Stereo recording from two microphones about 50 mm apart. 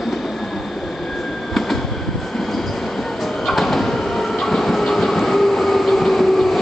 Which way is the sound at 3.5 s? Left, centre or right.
Centre.